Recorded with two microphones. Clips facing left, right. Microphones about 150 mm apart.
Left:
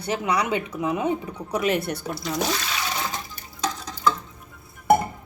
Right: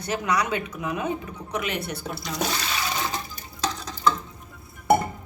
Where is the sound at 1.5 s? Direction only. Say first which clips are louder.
Left 6 dB; 35° left (ahead or behind).